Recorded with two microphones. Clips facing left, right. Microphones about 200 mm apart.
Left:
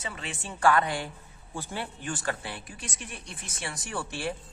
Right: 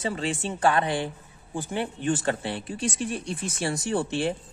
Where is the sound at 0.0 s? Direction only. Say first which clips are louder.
Right 10 dB; 30° right (ahead or behind).